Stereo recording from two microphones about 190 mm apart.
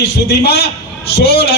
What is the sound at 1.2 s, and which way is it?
Music, 30° left (ahead or behind).